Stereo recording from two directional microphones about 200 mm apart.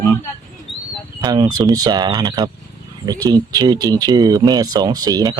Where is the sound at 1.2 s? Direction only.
20° right (ahead or behind).